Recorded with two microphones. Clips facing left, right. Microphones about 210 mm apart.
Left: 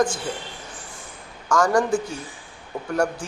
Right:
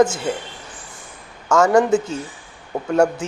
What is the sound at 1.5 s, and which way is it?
A man's voice, 25° right (ahead or behind).